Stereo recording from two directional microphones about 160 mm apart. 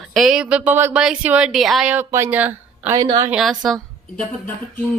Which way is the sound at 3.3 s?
Centre (ahead or behind).